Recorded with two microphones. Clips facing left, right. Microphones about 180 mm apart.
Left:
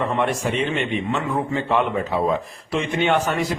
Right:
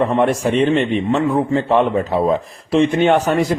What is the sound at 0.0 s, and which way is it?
A man's voice, 35° right (ahead or behind).